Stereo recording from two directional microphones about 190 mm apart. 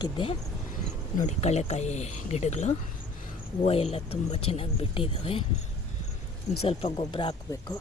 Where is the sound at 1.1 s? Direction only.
35° left (ahead or behind).